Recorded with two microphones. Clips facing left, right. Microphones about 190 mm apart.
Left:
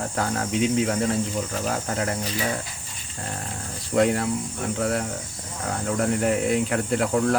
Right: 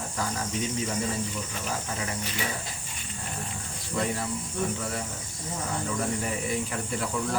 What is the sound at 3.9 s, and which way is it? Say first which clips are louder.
Speech: left 9 dB; 70° left (ahead or behind).